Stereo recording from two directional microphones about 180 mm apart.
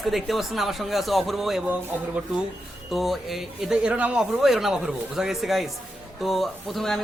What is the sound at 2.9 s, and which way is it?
A man's voice, centre (ahead or behind).